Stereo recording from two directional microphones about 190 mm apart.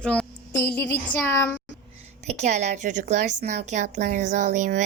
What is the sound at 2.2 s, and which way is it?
A woman's voice, 35° right (ahead or behind).